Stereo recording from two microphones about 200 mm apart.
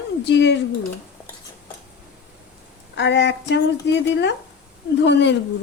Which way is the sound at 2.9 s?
60° left (ahead or behind).